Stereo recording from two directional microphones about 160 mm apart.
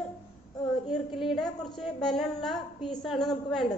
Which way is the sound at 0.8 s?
Centre (ahead or behind).